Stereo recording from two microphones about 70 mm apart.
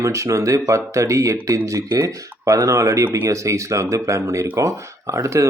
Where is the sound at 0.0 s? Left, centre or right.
Right.